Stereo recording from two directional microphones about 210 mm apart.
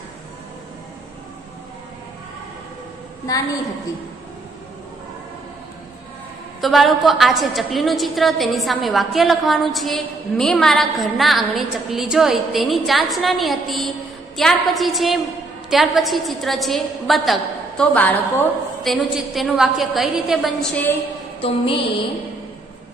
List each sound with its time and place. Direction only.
6.6 s a woman's voice: centre (ahead or behind)
21.4 s music: 25° left (ahead or behind)